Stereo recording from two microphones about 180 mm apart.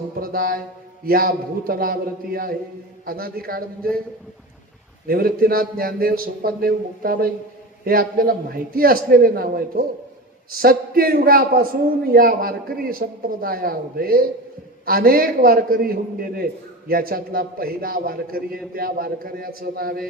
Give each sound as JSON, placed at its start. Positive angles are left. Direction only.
{"t": 0.2, "sound": "music", "side_deg": -55}
{"t": 1.0, "sound": "a man's voice", "side_deg": -55}
{"t": 5.0, "sound": "a man's voice", "side_deg": -55}